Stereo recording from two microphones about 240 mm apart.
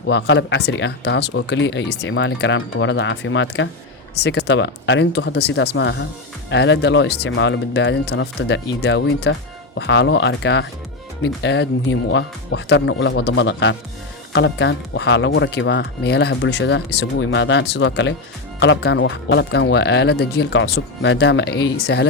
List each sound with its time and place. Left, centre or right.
0.1 s speech: left